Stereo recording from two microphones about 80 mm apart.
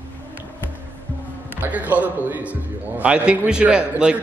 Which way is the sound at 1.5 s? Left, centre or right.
Centre.